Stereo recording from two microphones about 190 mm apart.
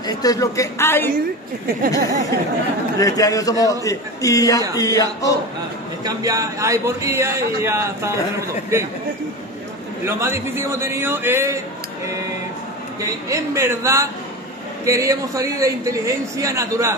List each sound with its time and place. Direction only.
0.0 s a woman's voice: 20° left (ahead or behind)
2.0 s speech: 60° right (ahead or behind)
3.0 s a woman's voice: 20° left (ahead or behind)
6.0 s a man's voice: 20° right (ahead or behind)
10.0 s a man's voice: 15° right (ahead or behind)
13.0 s a man's voice: 15° right (ahead or behind)